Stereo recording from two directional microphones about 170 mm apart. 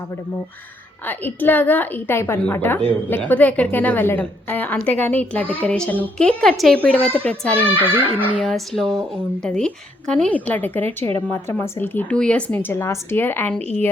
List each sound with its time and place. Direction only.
1.0 s a woman's voice: 10° left (ahead or behind)
7.9 s speech: 30° right (ahead or behind)
8.4 s a woman's voice: centre (ahead or behind)